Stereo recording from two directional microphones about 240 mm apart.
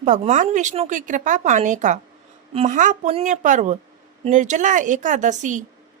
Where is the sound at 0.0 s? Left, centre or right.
Right.